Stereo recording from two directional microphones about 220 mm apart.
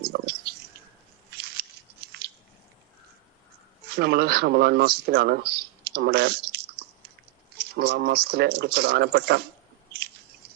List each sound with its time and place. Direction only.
0.0 s a sound: 45° right (ahead or behind)
3.8 s speech: 45° right (ahead or behind)
5.5 s clicking: 45° right (ahead or behind)
7.6 s speech: 45° right (ahead or behind)